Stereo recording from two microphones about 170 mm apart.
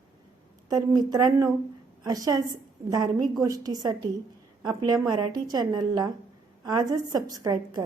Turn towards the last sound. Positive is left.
turn(degrees=-20)  # may be behind; listen again after turning